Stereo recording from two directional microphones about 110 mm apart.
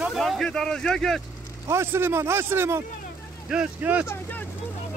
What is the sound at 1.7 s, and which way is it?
Speech, 20° right (ahead or behind).